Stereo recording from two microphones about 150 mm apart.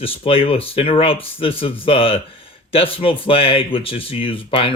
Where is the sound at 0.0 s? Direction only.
40° left (ahead or behind).